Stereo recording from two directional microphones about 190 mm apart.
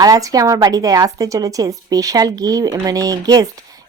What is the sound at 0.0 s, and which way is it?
A woman's voice, 20° right (ahead or behind).